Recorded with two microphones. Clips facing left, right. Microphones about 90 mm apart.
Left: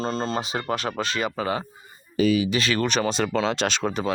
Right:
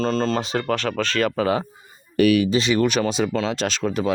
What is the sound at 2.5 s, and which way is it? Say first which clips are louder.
Speech: right 4 dB; 20° right (ahead or behind).